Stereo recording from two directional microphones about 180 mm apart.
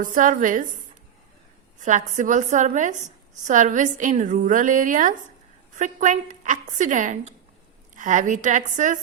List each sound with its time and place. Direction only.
0.0 s a woman's voice: 45° right (ahead or behind)
1.8 s a woman's voice: 45° right (ahead or behind)